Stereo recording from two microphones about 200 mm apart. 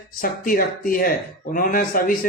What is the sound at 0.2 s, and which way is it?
A man's voice, 45° left (ahead or behind).